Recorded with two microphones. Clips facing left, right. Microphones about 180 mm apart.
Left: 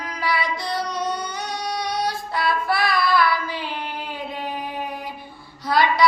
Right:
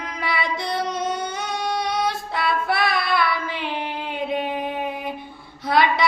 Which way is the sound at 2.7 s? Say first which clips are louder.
Left 1 dB; 20° right (ahead or behind).